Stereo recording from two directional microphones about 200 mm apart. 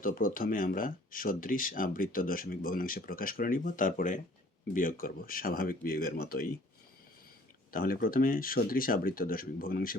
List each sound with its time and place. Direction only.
0.0 s speech: 45° left (ahead or behind)
7.7 s speech: 45° left (ahead or behind)